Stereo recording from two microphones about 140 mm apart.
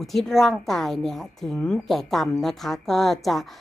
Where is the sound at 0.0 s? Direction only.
Centre (ahead or behind).